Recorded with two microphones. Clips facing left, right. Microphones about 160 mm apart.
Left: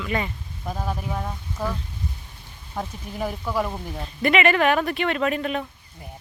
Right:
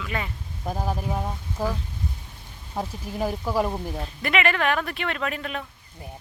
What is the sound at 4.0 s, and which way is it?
Speech, centre (ahead or behind).